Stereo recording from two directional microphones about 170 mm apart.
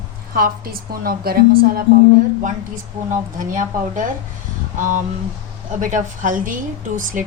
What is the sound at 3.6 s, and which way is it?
Speech, 50° right (ahead or behind).